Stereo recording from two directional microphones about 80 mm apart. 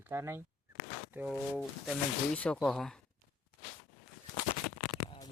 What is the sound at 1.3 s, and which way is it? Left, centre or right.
Speech, centre.